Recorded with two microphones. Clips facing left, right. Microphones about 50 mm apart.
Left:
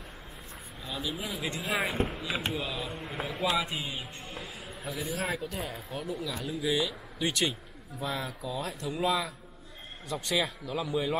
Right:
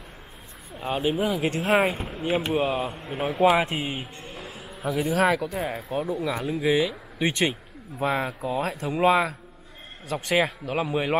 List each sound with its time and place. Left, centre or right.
0.8 s speech: right
4.3 s music: centre
4.8 s speech: right
5.9 s speech: right
6.7 s speech: right
8.0 s speech: right
8.6 s speech: right